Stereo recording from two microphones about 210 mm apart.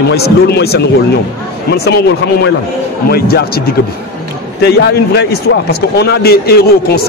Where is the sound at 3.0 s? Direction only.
45° left (ahead or behind).